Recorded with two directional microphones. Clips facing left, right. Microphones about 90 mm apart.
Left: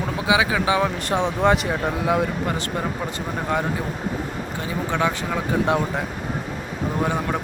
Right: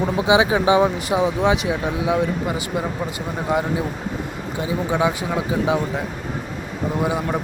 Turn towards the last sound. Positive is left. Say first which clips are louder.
# right 1 dB
turn(degrees=-10)  # may be behind; listen again after turning